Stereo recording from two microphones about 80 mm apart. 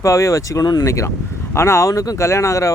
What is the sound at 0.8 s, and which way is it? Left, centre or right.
Speech, left.